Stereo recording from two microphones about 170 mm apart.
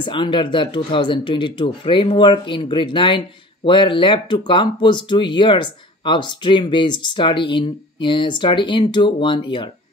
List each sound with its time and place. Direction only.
0.0 s speech: 30° left (ahead or behind)